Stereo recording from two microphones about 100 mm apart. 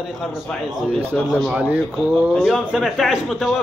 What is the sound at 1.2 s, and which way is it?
Speech, 5° right (ahead or behind).